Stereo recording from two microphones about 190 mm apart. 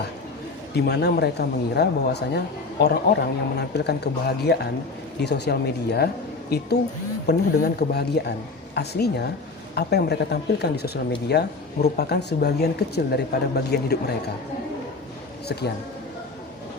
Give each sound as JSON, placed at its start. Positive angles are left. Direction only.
{"t": 0.7, "sound": "speech", "side_deg": 60}